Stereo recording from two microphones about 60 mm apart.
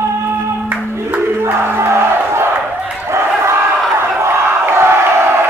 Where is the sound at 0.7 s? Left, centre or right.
Right.